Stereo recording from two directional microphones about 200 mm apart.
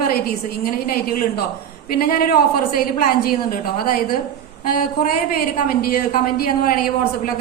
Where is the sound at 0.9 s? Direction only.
50° left (ahead or behind).